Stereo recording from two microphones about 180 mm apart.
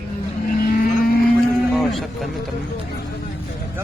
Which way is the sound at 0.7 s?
50° left (ahead or behind).